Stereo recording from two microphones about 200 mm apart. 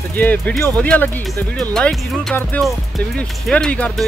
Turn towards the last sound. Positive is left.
turn(degrees=5)  # may be behind; listen again after turning